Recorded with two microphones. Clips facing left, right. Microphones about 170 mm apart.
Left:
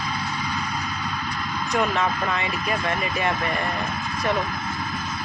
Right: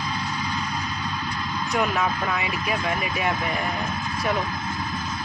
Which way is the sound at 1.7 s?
5° right (ahead or behind).